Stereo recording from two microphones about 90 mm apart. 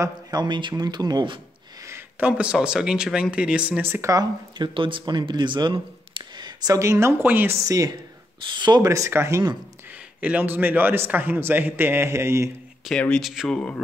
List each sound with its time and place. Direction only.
0.0 s speech: 50° right (ahead or behind)
1.8 s a sound: 30° right (ahead or behind)
2.1 s speech: 15° right (ahead or behind)
3.8 s a man's voice: 25° right (ahead or behind)
4.6 s speech: 65° right (ahead or behind)
6.7 s a man's voice: 35° right (ahead or behind)
7.6 s speech: 40° right (ahead or behind)
8.5 s speech: 55° right (ahead or behind)
8.8 s speech: 35° right (ahead or behind)
9.8 s a man's voice: 15° right (ahead or behind); by 12.4 s 30° right (ahead or behind)
12.9 s speech: centre (ahead or behind)